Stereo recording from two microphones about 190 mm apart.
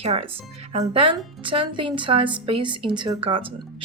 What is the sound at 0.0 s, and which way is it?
Speech, 30° right (ahead or behind).